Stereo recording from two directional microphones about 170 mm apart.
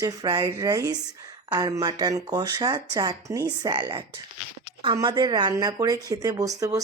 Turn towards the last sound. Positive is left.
turn(degrees=-20)  # may be behind; listen again after turning